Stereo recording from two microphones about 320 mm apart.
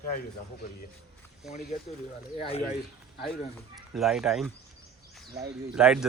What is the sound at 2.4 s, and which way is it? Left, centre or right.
Speech, centre.